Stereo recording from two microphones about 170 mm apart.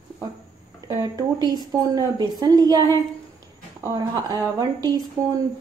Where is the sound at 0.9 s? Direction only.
20° right (ahead or behind).